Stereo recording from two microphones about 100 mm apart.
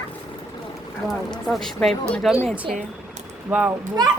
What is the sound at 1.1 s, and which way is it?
Speech, centre (ahead or behind).